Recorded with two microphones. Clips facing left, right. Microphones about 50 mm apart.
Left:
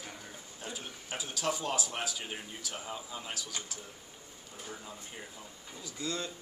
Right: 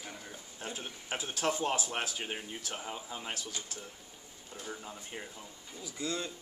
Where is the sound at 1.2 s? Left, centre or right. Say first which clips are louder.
Right 2 dB; right.